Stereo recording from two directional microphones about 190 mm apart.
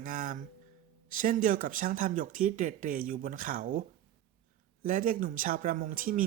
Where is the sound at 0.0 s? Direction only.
45° right (ahead or behind).